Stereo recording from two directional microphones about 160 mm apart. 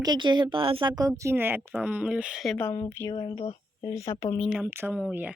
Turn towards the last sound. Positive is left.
turn(degrees=-10)  # may be behind; listen again after turning